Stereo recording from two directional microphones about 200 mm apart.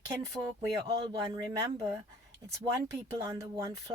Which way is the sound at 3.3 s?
15° right (ahead or behind).